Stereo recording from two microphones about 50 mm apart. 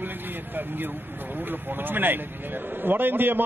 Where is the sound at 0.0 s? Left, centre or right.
Right.